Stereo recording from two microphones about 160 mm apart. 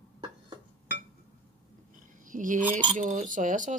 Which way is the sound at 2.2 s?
55° right (ahead or behind).